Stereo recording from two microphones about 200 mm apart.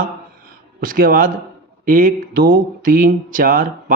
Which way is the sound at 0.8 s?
45° right (ahead or behind).